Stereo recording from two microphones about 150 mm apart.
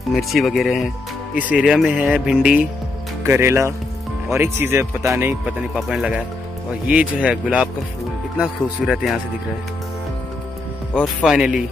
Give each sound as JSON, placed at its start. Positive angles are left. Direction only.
{"t": 0.1, "sound": "speech", "side_deg": 0}
{"t": 3.3, "sound": "speech", "side_deg": -15}
{"t": 5.8, "sound": "speech", "side_deg": -5}
{"t": 11.2, "sound": "speech", "side_deg": -5}